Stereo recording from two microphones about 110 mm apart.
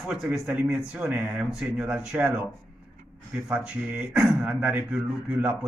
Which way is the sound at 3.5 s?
5° right (ahead or behind).